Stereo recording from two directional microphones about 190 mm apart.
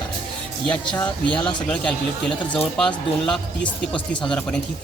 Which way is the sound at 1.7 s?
5° left (ahead or behind).